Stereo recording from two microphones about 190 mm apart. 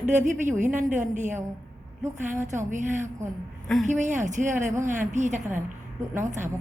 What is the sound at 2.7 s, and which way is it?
Speech, 40° right (ahead or behind).